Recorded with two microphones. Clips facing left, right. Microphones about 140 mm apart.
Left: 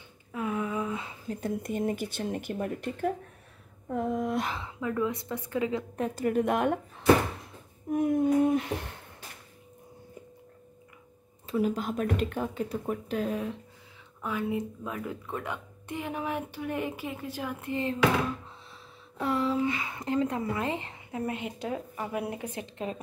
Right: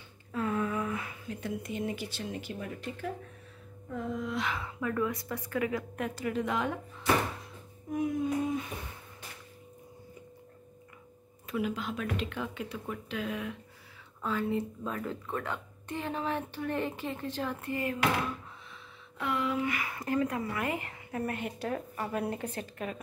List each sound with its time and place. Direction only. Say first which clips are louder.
0.3 s a sound: even; 15° left (ahead or behind)
1.3 s speech: left 5 dB; 45° left (ahead or behind)
4.5 s speech: left 1 dB; 20° left (ahead or behind)
6.1 s speech: left 6 dB; 50° left (ahead or behind)
7.9 s speech: left 6 dB; 55° left (ahead or behind); by 9.0 s 80° left
11.4 s speech: left 5 dB; 35° left (ahead or behind)
14.2 s a woman's voice: even; 15° left (ahead or behind)
19.1 s speech: left 4 dB; 35° left (ahead or behind); by 22.7 s 15° left (ahead or behind)